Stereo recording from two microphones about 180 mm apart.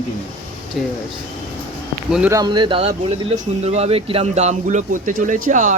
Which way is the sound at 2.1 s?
5° right (ahead or behind).